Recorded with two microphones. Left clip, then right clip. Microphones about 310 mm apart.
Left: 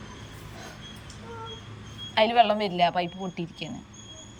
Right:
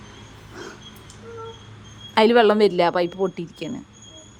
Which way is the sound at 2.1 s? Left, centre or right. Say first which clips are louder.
Right 5 dB; centre.